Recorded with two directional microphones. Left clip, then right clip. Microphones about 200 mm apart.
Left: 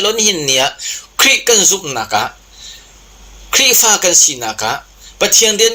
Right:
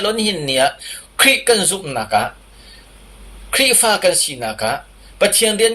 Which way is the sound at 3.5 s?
30° left (ahead or behind).